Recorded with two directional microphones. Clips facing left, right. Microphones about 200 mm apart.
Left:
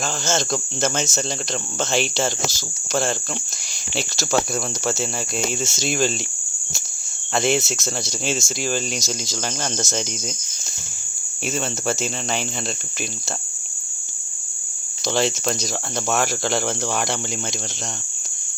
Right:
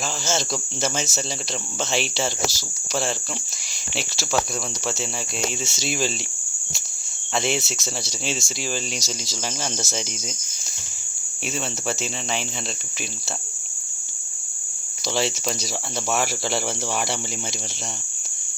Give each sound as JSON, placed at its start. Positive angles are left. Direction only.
{"t": 0.0, "sound": "speech", "side_deg": -5}
{"t": 2.5, "sound": "cricket", "side_deg": 50}
{"t": 3.9, "sound": "speech", "side_deg": 0}
{"t": 5.7, "sound": "speech", "side_deg": 0}
{"t": 7.3, "sound": "speech", "side_deg": 0}
{"t": 11.5, "sound": "speech", "side_deg": 0}
{"t": 15.1, "sound": "speech", "side_deg": -5}